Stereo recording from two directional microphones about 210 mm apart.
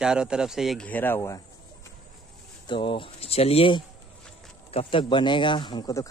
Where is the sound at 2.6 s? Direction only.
25° left (ahead or behind).